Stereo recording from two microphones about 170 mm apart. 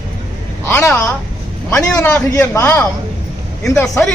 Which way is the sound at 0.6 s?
10° left (ahead or behind).